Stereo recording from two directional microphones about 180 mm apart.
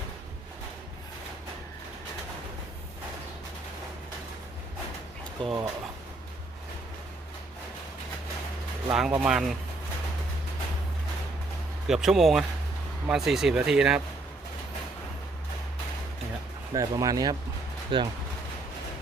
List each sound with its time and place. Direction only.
5.4 s speech: 30° right (ahead or behind)
8.9 s speech: 5° right (ahead or behind)
11.9 s speech: centre (ahead or behind)
16.7 s speech: 20° right (ahead or behind)